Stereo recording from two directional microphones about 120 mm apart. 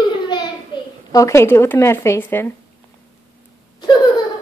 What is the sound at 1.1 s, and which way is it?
Speech, 25° left (ahead or behind).